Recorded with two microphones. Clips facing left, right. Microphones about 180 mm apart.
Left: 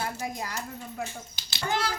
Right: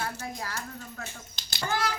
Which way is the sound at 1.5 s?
20° left (ahead or behind).